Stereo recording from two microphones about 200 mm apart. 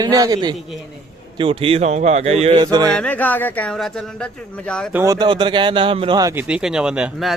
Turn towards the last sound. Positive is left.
turn(degrees=0)  # may be behind; listen again after turning